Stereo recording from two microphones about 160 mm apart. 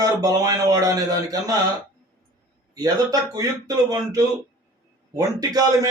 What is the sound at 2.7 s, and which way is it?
Speech, 25° right (ahead or behind).